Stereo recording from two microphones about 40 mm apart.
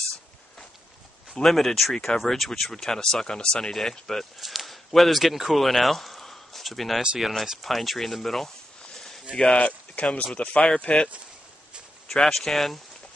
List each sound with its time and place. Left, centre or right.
1.3 s speech: centre; by 3.7 s left
3.7 s speech: centre
4.4 s speech: centre
8.9 s a sound: centre
9.3 s speech: centre
9.6 s speech: left
12.1 s speech: centre